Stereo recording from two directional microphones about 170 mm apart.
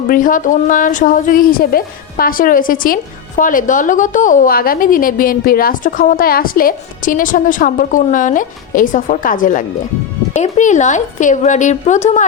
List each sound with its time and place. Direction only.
0.1 s a woman's voice: 50° left (ahead or behind)